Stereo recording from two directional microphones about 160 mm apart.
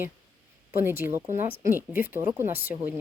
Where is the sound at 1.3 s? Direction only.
15° right (ahead or behind).